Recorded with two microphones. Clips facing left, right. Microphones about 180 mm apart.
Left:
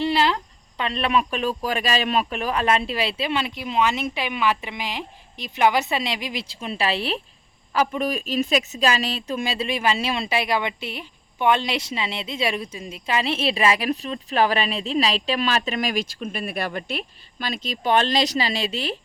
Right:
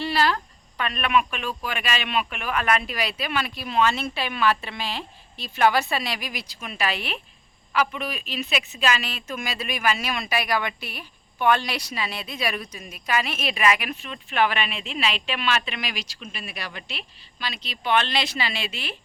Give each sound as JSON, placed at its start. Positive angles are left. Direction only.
{"t": 0.0, "sound": "speech", "side_deg": 20}